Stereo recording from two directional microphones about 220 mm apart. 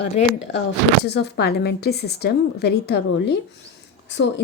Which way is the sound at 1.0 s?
50° left (ahead or behind).